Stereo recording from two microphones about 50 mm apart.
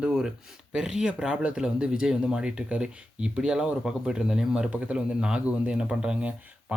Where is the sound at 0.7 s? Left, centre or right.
Centre.